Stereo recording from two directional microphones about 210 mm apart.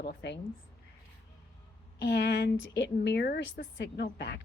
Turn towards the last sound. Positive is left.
turn(degrees=50)  # may be behind; listen again after turning